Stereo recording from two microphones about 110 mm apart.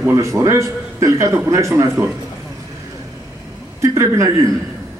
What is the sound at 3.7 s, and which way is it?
Speech, 25° right (ahead or behind).